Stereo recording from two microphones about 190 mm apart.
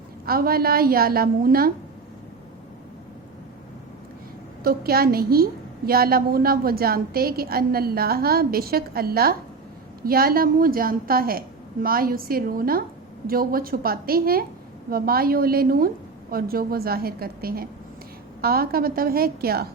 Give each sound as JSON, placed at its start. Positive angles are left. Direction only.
{"t": 0.3, "sound": "a woman's voice", "side_deg": -50}
{"t": 4.6, "sound": "a woman's voice", "side_deg": -50}